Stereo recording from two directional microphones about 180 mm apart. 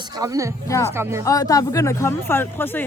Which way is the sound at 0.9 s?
15° right (ahead or behind).